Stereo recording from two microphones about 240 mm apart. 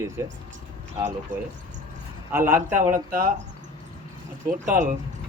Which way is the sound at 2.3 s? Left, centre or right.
Centre.